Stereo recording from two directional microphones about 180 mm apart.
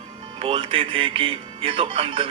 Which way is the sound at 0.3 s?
30° right (ahead or behind).